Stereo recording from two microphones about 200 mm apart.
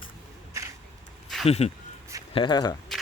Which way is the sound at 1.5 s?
30° left (ahead or behind).